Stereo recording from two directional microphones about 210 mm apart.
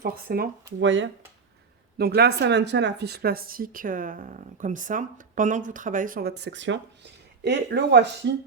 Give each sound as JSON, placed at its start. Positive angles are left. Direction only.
{"t": 0.0, "sound": "speech", "side_deg": -45}
{"t": 0.8, "sound": "speech", "side_deg": -60}
{"t": 2.0, "sound": "speech", "side_deg": -50}